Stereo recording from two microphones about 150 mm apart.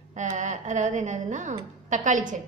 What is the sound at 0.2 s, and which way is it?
A woman's voice, 55° right (ahead or behind).